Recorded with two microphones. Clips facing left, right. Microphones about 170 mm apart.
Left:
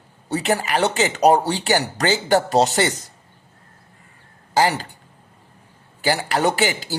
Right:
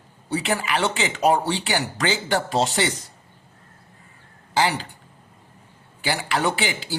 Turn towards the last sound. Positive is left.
turn(degrees=45)  # may be behind; listen again after turning